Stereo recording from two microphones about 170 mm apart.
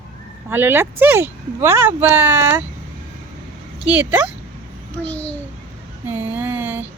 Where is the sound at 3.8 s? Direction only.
10° right (ahead or behind).